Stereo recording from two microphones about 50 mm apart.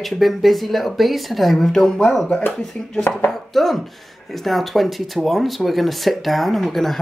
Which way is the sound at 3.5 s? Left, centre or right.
Centre.